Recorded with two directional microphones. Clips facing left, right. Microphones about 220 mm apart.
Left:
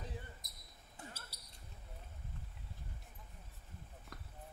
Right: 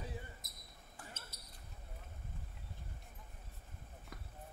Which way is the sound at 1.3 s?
35° left (ahead or behind).